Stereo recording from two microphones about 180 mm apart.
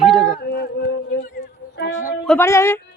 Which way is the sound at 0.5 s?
65° left (ahead or behind).